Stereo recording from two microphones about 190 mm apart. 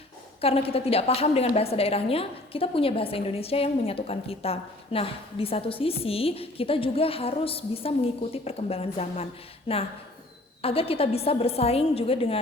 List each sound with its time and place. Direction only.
0.4 s a woman's voice: 30° left (ahead or behind)
10.6 s a woman's voice: 30° left (ahead or behind)